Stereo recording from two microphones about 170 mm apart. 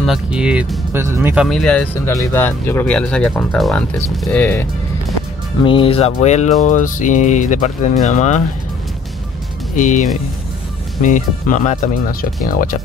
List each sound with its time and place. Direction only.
0.0 s speech: 5° right (ahead or behind)
5.6 s speech: 30° left (ahead or behind)
9.8 s speech: 45° left (ahead or behind)